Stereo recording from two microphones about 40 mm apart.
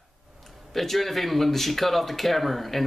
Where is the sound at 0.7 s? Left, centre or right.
Centre.